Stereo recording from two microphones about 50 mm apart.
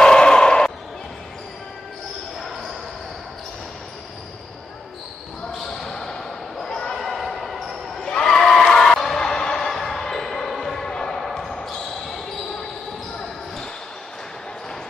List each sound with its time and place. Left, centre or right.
0.0 s basketball bounce: centre
5.5 s basketball bounce: centre